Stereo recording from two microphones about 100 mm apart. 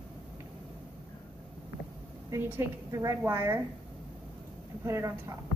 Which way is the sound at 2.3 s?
20° right (ahead or behind).